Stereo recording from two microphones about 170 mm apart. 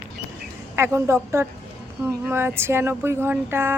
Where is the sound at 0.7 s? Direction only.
15° right (ahead or behind).